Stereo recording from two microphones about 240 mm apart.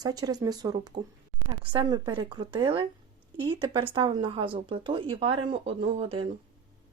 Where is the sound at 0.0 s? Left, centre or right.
Centre.